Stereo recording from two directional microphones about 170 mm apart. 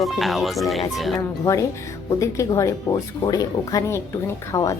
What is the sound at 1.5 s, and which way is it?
Speech, 15° left (ahead or behind).